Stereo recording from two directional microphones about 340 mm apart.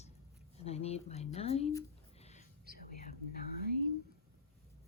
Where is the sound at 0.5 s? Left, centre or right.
Centre.